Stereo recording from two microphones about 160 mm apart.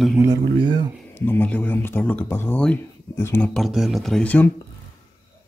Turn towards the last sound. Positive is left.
turn(degrees=10)  # may be behind; listen again after turning